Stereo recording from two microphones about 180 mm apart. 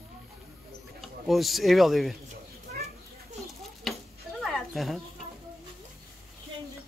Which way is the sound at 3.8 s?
Centre (ahead or behind).